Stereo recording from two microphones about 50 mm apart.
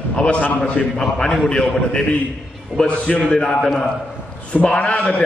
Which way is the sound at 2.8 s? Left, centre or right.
Left.